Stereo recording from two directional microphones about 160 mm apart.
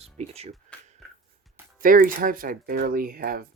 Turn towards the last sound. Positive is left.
turn(degrees=-65)  # may be behind; listen again after turning